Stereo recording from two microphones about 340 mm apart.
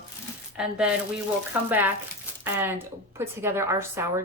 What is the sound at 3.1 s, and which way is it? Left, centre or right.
Speech, centre.